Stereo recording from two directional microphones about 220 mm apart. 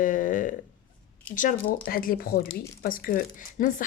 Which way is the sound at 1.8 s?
40° left (ahead or behind).